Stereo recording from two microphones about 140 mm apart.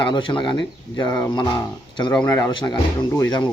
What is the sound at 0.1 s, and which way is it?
Speech, 35° left (ahead or behind).